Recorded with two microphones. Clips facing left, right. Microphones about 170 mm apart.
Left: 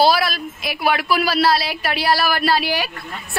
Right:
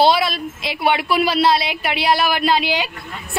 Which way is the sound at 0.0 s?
25° right (ahead or behind).